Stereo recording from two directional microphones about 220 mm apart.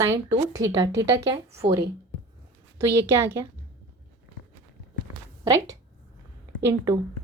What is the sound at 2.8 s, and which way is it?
Speech, 10° right (ahead or behind).